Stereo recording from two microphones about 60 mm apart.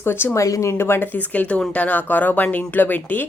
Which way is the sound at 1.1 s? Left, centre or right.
Left.